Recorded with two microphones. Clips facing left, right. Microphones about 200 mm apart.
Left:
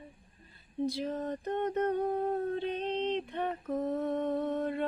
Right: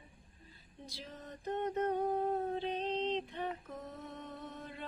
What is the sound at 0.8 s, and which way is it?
Mantra, 60° left (ahead or behind).